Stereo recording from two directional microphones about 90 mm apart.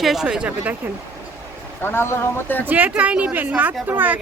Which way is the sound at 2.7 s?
20° right (ahead or behind).